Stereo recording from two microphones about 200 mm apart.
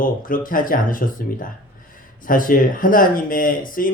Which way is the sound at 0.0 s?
45° left (ahead or behind).